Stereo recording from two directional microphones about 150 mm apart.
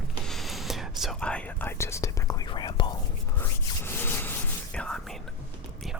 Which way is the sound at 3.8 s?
15° left (ahead or behind).